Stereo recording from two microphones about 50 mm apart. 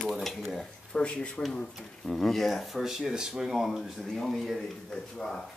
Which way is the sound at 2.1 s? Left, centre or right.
Centre.